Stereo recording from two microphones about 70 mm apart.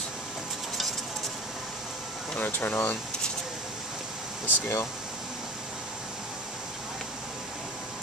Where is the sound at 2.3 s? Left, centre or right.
Left.